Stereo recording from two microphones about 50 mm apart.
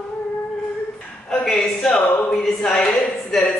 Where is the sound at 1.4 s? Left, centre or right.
Centre.